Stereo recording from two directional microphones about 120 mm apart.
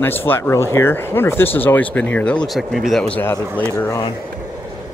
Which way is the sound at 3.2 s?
15° left (ahead or behind).